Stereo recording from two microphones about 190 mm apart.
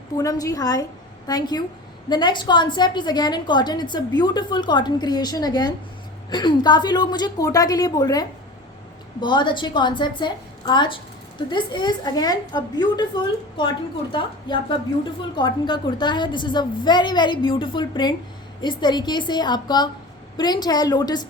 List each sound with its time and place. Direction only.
0.2 s a woman's voice: 20° left (ahead or behind)
14.1 s a woman's voice: 25° left (ahead or behind)